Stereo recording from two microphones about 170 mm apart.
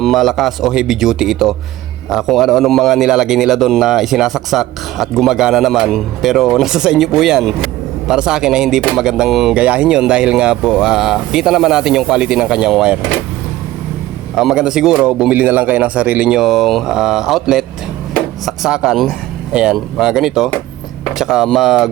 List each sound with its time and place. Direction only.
0.0 s a man's voice: centre (ahead or behind)
14.3 s a man's voice: 5° right (ahead or behind)